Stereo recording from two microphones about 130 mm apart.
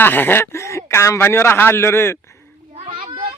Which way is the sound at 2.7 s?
45° right (ahead or behind).